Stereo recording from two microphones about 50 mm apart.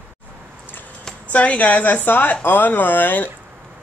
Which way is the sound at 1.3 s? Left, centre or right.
Left.